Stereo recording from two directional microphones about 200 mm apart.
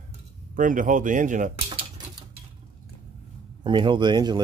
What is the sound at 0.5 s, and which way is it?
Speech, 40° right (ahead or behind).